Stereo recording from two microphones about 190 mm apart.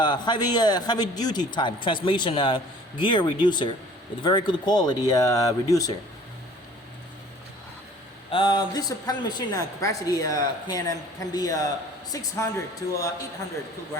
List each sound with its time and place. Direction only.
0.0 s a woman's voice: 25° left (ahead or behind)
8.3 s a woman's voice: 25° left (ahead or behind)